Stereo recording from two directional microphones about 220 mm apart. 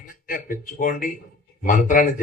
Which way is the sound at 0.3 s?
40° left (ahead or behind).